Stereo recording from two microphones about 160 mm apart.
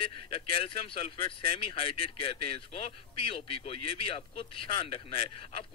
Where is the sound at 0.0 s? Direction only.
35° left (ahead or behind).